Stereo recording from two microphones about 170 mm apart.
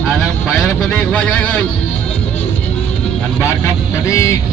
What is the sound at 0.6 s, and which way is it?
Vehicle, 5° left (ahead or behind).